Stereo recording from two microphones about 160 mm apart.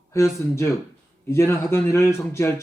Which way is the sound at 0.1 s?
15° left (ahead or behind).